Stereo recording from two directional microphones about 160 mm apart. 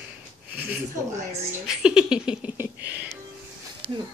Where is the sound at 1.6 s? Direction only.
5° right (ahead or behind).